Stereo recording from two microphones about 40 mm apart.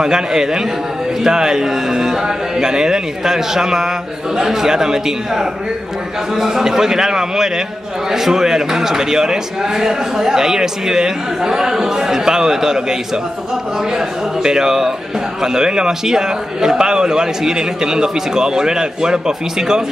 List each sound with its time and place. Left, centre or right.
0.0 s speech: centre